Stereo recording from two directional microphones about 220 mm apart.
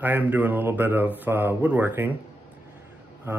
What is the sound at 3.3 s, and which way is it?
Speech, 10° right (ahead or behind).